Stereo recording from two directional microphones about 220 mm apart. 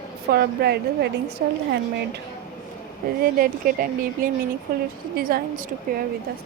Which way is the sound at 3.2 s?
40° right (ahead or behind).